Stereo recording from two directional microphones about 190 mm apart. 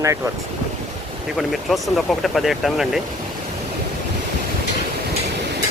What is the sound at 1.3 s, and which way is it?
Speech, centre (ahead or behind).